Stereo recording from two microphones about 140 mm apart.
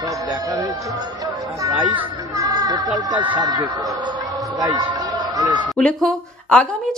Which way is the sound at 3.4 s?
25° right (ahead or behind).